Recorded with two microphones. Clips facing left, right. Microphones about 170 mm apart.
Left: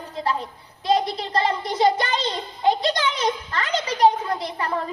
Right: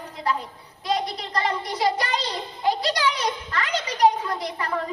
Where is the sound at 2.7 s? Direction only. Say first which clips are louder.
Left 2 dB; 25° left (ahead or behind).